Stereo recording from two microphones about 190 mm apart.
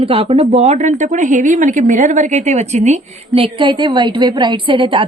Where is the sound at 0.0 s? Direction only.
30° right (ahead or behind).